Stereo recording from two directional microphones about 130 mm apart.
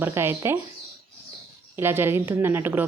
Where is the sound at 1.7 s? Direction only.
15° right (ahead or behind).